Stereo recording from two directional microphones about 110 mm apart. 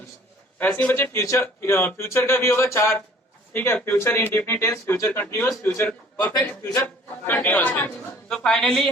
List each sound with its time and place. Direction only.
0.6 s a man's voice: 15° left (ahead or behind)
1.1 s a man's voice: 25° left (ahead or behind); by 8.9 s 5° left (ahead or behind)